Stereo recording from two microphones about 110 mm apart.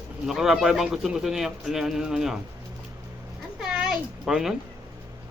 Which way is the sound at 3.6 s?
5° right (ahead or behind).